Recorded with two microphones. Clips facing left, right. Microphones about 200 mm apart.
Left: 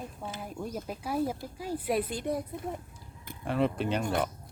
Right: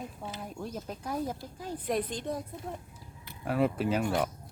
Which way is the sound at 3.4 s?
5° right (ahead or behind).